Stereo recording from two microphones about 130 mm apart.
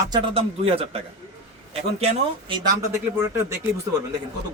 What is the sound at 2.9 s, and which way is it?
Speech, 20° right (ahead or behind).